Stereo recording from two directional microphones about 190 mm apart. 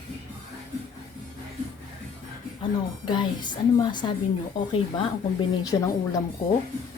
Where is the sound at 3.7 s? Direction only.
25° left (ahead or behind).